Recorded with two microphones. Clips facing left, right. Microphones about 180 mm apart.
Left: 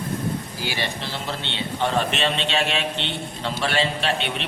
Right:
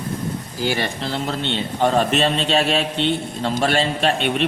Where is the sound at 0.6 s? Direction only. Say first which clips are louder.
Right 11 dB; 45° right (ahead or behind).